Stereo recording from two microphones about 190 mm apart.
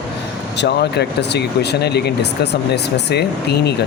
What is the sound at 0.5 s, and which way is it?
Speech, 65° left (ahead or behind).